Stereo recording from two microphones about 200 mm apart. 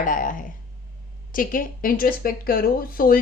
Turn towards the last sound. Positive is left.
turn(degrees=45)  # may be behind; listen again after turning